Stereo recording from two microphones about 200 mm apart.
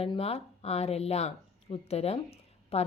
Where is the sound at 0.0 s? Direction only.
30° left (ahead or behind).